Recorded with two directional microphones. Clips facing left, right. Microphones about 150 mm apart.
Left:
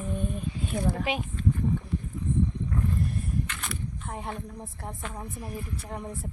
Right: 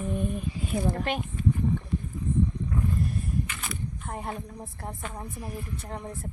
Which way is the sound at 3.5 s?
Centre (ahead or behind).